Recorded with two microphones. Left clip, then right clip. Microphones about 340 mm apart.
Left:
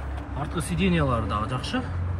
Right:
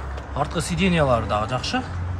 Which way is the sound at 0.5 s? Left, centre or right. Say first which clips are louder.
Right 3 dB; centre.